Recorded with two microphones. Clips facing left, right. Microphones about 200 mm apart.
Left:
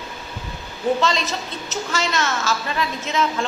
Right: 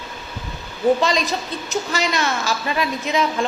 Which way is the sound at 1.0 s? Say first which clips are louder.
Right 2 dB; 15° right (ahead or behind).